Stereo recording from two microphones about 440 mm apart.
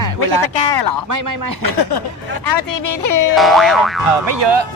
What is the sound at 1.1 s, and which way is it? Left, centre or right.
Music, right.